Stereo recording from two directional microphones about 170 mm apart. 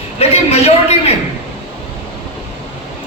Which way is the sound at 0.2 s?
35° left (ahead or behind).